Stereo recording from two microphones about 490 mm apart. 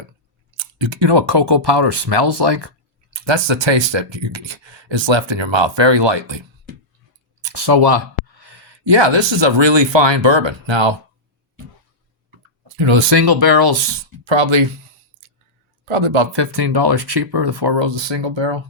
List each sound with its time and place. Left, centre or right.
0.5 s speech: right
7.4 s speech: right
12.7 s speech: right
15.9 s speech: right